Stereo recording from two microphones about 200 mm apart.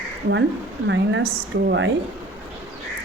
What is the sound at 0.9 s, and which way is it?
A woman's voice, 60° right (ahead or behind).